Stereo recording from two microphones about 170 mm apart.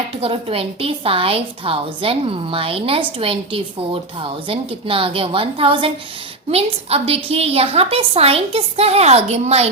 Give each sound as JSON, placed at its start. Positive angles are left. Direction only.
{"t": 0.2, "sound": "a woman's voice", "side_deg": -35}